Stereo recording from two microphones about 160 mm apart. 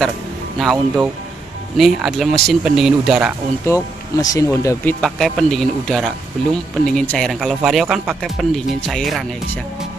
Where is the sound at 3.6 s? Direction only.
20° left (ahead or behind).